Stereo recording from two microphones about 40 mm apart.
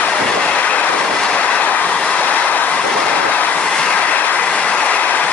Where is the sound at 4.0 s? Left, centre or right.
Left.